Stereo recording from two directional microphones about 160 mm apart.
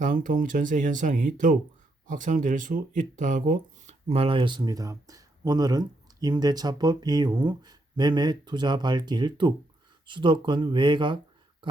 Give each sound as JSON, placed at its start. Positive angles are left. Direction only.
{"t": 0.0, "sound": "speech", "side_deg": -55}
{"t": 4.1, "sound": "speech", "side_deg": -35}